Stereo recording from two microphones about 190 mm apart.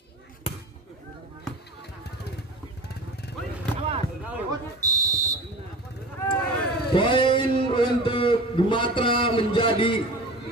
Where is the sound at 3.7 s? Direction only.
35° right (ahead or behind).